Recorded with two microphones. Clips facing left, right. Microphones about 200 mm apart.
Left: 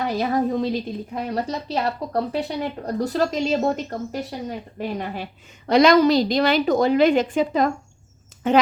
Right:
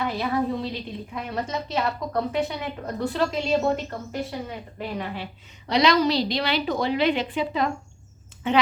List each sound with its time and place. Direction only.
0.0 s a woman's voice: 40° left (ahead or behind)